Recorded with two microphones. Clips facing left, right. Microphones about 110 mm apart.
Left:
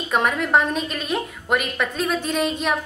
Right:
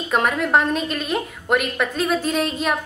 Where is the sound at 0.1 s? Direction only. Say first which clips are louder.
Right 1 dB; centre (ahead or behind).